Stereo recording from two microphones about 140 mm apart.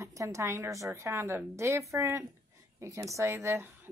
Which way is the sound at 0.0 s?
20° right (ahead or behind).